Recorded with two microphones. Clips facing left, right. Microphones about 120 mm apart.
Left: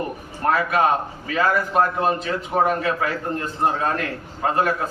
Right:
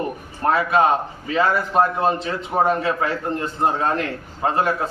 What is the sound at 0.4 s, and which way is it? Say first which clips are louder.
A man's voice: right 2 dB; 25° right (ahead or behind).